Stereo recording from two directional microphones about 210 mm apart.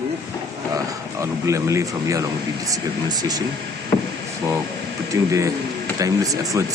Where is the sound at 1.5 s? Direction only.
15° right (ahead or behind).